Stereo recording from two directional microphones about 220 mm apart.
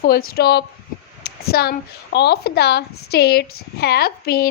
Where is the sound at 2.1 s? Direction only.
50° left (ahead or behind).